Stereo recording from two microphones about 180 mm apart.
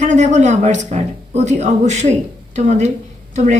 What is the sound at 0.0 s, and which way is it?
Speech, 40° right (ahead or behind).